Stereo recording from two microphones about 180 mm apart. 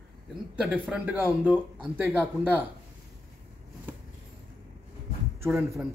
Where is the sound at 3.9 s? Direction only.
10° right (ahead or behind).